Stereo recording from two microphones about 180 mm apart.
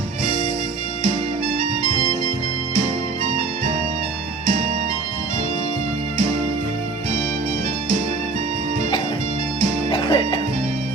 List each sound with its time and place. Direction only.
9.9 s music: 25° left (ahead or behind)